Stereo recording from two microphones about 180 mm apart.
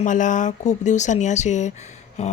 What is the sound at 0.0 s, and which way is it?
A woman's voice, 45° left (ahead or behind).